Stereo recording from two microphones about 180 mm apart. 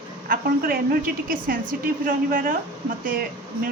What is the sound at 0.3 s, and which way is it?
A woman's voice, 50° right (ahead or behind).